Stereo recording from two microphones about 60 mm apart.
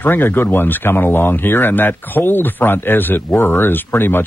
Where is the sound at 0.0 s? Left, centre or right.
Left.